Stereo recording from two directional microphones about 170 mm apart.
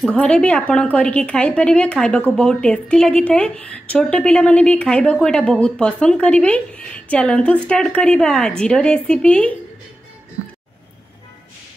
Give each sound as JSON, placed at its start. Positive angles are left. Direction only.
{"t": 0.0, "sound": "a woman's voice", "side_deg": 5}